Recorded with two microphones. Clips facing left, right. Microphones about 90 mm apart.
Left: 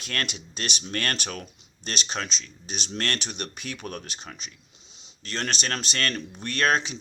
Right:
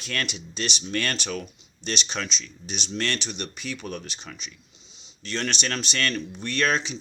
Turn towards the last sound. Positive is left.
turn(degrees=50)  # may be behind; listen again after turning